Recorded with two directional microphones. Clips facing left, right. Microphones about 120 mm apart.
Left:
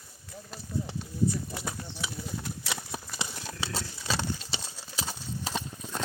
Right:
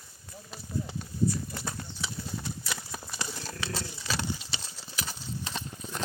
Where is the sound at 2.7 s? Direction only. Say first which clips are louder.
Left 5 dB; 15° left (ahead or behind).